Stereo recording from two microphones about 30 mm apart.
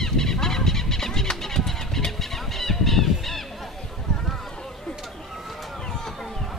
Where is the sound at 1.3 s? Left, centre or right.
Centre.